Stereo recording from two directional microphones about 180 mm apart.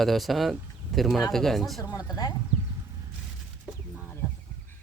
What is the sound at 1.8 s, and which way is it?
Speech, 20° left (ahead or behind).